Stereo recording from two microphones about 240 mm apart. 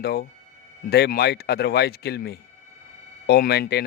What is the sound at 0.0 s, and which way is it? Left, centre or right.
Speech, left.